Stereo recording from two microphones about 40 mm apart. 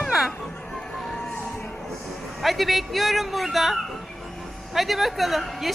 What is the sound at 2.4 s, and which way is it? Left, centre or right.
A woman's voice, centre.